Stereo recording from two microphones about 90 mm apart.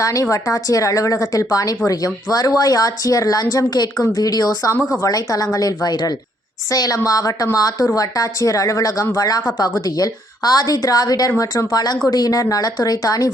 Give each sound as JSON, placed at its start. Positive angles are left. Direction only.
{"t": 0.0, "sound": "a woman's voice", "side_deg": 35}